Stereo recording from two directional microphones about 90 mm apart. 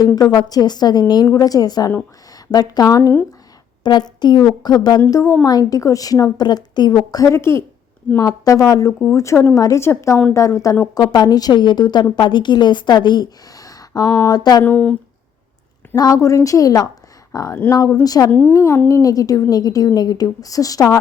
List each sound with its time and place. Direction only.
0.2 s a woman's voice: 45° left (ahead or behind)
3.8 s a woman's voice: 55° left (ahead or behind)
5.1 s a woman's voice: 35° left (ahead or behind)
6.3 s a woman's voice: 50° left (ahead or behind)
7.3 s a woman's voice: 30° left (ahead or behind)
8.9 s speech: centre (ahead or behind)
9.6 s a woman's voice: 35° left (ahead or behind)
10.9 s a woman's voice: 50° left (ahead or behind)
14.6 s speech: 20° left (ahead or behind)
16.0 s a woman's voice: 40° left (ahead or behind)
18.3 s a woman's voice: 25° left (ahead or behind); by 21.0 s 40° left (ahead or behind)